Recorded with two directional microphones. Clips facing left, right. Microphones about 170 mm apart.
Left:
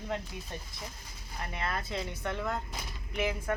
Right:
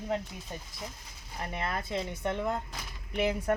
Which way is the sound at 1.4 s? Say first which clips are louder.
Right 2 dB; 20° right (ahead or behind).